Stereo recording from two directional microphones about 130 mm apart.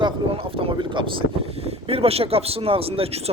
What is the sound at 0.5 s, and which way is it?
Speech, 45° right (ahead or behind).